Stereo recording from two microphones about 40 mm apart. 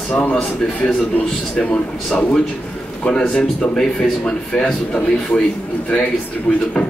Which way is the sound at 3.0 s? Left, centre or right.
Left.